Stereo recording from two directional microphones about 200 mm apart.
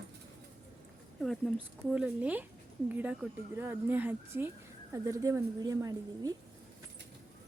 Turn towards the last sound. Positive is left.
turn(degrees=-15)  # may be behind; listen again after turning